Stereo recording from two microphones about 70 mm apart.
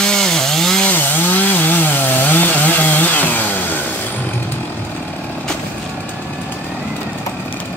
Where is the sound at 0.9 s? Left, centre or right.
Left.